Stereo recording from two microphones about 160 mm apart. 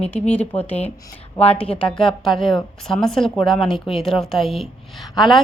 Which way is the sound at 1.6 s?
10° left (ahead or behind).